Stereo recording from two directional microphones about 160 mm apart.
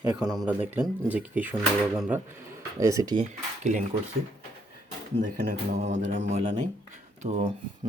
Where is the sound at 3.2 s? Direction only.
45° right (ahead or behind).